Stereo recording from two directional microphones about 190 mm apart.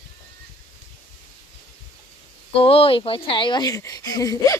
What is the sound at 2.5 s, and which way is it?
A woman's voice, 30° left (ahead or behind).